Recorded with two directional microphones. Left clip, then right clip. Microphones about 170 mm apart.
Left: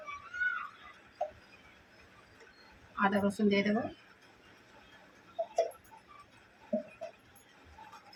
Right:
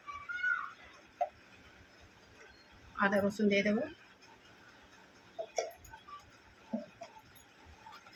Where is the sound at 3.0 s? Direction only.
5° right (ahead or behind).